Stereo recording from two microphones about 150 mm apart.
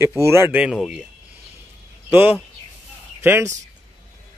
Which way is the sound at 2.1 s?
15° right (ahead or behind).